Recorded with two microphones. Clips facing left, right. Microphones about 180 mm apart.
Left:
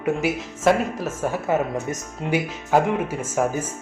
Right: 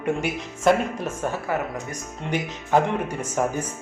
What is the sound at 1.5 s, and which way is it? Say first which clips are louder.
Speech: left 5 dB; 25° left (ahead or behind).